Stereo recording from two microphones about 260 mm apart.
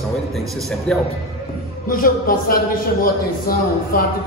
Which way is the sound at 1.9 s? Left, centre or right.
Left.